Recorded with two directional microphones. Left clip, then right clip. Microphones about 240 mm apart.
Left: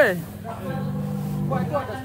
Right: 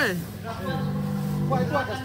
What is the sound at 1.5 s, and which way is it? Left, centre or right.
Music, right.